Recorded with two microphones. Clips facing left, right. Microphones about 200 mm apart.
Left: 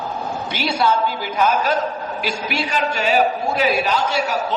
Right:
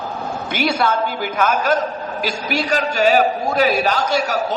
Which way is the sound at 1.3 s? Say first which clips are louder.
Right 1 dB; 50° right (ahead or behind).